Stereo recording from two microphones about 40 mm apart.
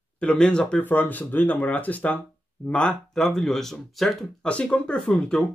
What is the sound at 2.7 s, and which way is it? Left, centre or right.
Speech, left.